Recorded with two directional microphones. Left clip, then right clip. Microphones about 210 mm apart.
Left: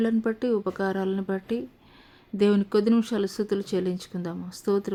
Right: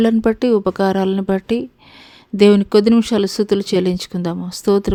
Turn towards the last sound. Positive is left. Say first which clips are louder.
# right 10 dB
turn(degrees=-40)  # may be behind; listen again after turning